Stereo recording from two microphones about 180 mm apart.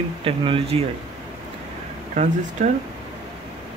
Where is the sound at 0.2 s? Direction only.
30° right (ahead or behind).